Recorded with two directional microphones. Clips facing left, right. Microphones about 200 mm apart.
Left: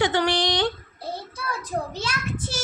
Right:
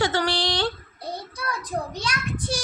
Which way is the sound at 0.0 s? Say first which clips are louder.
Left 2 dB; 20° left (ahead or behind).